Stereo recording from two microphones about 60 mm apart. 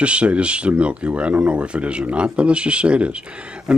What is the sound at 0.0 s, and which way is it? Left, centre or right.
A man's voice, centre.